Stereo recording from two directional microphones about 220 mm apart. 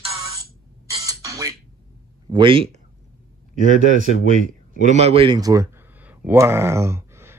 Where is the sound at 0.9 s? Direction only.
15° right (ahead or behind).